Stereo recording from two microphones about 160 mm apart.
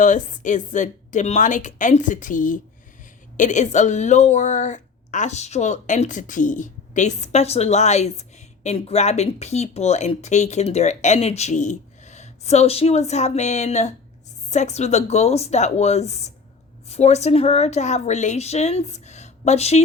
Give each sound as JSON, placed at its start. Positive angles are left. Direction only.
{"t": 0.0, "sound": "a woman's voice", "side_deg": 50}